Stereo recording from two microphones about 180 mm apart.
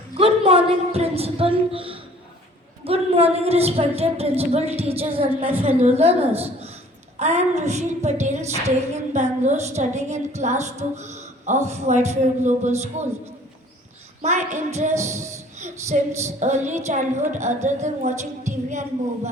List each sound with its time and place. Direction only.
0.2 s a woman's voice: 35° right (ahead or behind)
14.2 s a woman's voice: 40° right (ahead or behind)